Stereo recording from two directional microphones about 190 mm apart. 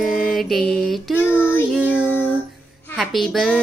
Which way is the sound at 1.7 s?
5° right (ahead or behind).